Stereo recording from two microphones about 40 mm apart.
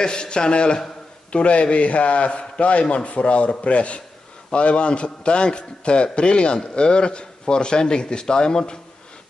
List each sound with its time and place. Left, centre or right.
0.0 s a man's voice: left